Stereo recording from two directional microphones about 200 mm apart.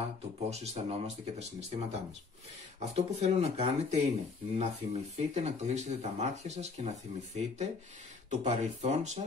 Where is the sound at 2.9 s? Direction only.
30° right (ahead or behind).